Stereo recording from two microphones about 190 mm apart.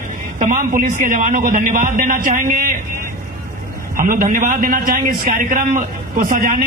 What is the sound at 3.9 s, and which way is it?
A man's voice, 45° right (ahead or behind).